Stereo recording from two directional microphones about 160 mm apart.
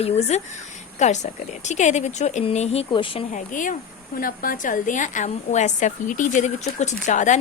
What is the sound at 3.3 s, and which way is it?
A woman's voice, 55° left (ahead or behind).